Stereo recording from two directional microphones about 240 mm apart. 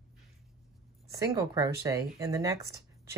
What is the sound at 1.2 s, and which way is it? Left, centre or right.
Speech, centre.